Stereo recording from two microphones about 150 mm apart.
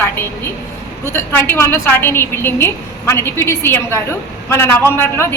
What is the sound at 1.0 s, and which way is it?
A woman's voice, 15° left (ahead or behind).